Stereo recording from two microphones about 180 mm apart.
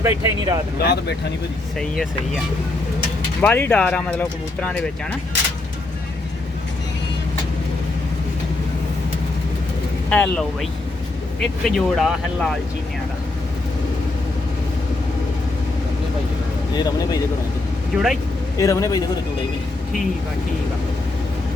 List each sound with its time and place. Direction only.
0.0 s speech: 20° right (ahead or behind)
0.8 s speech: 65° left (ahead or behind)
1.8 s speech: centre (ahead or behind)
3.4 s speech: 10° left (ahead or behind)
10.1 s speech: 5° left (ahead or behind)
16.7 s speech: 25° left (ahead or behind)
17.9 s speech: centre (ahead or behind)
18.5 s speech: 15° left (ahead or behind)